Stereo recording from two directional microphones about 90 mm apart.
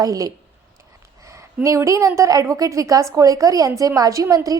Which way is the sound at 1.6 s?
35° right (ahead or behind).